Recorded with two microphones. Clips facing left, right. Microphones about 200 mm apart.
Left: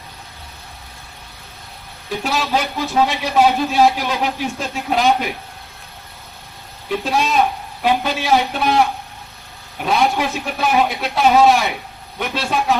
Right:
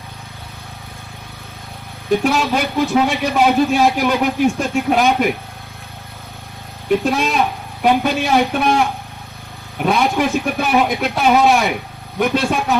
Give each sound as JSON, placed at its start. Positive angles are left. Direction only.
{"t": 2.0, "sound": "a man's voice", "side_deg": -55}
{"t": 7.0, "sound": "a man's voice", "side_deg": -50}
{"t": 9.7, "sound": "a man's voice", "side_deg": -50}